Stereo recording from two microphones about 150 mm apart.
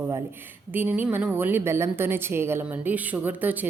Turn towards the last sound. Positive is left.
turn(degrees=-10)  # may be behind; listen again after turning